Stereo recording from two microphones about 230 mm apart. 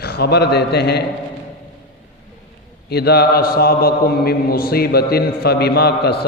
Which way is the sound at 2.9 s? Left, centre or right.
Left.